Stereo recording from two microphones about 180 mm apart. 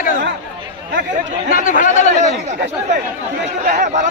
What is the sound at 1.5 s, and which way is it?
Speech, 50° left (ahead or behind).